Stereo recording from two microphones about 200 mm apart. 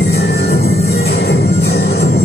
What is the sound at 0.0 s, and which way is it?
Music, 55° left (ahead or behind).